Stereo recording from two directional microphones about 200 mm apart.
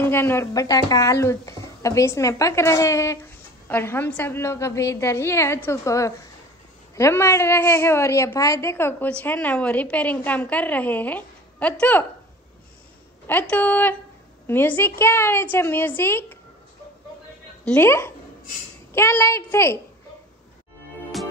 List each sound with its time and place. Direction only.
0.0 s a woman's voice: 10° left (ahead or behind)
13.3 s a woman's voice: 10° left (ahead or behind)
17.6 s a woman's voice: 10° left (ahead or behind)
21.1 s music: centre (ahead or behind)